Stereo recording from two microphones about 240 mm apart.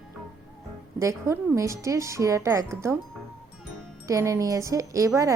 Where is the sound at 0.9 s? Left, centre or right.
Centre.